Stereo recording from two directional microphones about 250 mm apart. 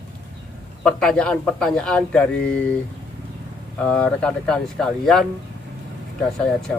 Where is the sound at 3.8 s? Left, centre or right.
Centre.